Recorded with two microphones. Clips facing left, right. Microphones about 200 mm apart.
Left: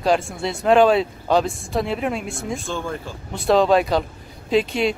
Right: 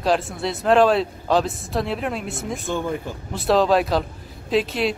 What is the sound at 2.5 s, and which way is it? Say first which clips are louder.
Speech: right 2 dB; 20° right (ahead or behind).